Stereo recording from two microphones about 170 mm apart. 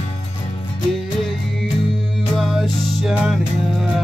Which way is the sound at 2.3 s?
Centre (ahead or behind).